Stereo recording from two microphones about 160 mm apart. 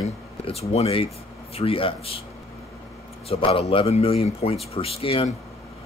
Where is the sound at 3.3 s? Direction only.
35° left (ahead or behind).